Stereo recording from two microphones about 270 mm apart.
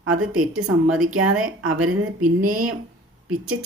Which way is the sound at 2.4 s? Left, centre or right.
Right.